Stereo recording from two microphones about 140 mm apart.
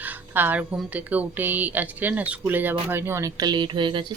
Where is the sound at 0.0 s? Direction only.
15° right (ahead or behind).